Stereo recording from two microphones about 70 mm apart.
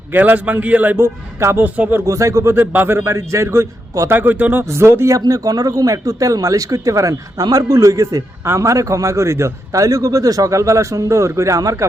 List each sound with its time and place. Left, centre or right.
0.1 s a man's voice: right
1.0 s speech: right
1.6 s a man's voice: right
2.0 s a man's voice: right
4.2 s a man's voice: right
4.6 s speech: right
5.2 s a man's voice: right